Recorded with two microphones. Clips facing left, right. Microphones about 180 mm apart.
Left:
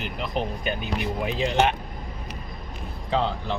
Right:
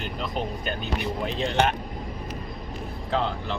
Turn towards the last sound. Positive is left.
turn(degrees=0)  # may be behind; listen again after turning